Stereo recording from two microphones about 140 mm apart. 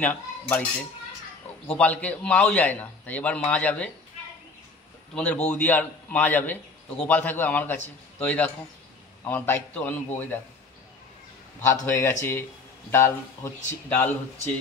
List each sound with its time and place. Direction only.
0.0 s cutlery: 10° left (ahead or behind)
1.7 s a man's voice: 10° left (ahead or behind)
5.1 s a man's voice: 10° left (ahead or behind)
11.6 s a man's voice: 15° left (ahead or behind)